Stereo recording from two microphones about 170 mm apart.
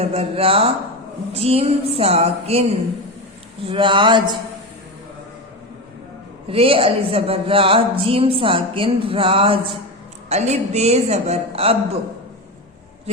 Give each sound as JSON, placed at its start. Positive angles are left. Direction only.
{"t": 0.0, "sound": "speech", "side_deg": -35}
{"t": 3.7, "sound": "speech", "side_deg": -30}
{"t": 6.5, "sound": "speech", "side_deg": -35}